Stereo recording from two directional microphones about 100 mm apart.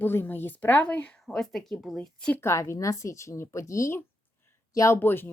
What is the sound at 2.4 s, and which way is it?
Speech, 30° left (ahead or behind).